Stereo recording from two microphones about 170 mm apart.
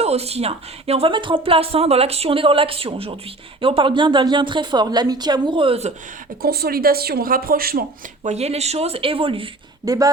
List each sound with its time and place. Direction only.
0.0 s a woman's voice: 40° right (ahead or behind)
6.4 s speech: 65° right (ahead or behind)
8.2 s speech: 40° right (ahead or behind)